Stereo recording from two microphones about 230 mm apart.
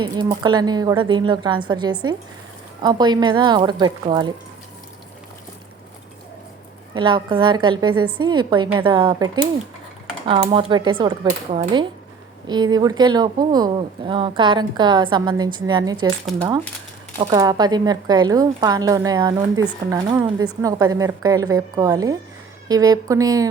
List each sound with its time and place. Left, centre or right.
0.0 s speech: centre
6.9 s speech: right
11.3 s speech: right
12.5 s speech: centre
17.2 s speech: centre